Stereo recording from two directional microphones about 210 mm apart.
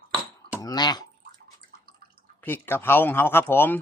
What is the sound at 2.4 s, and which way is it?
Speech, 10° left (ahead or behind).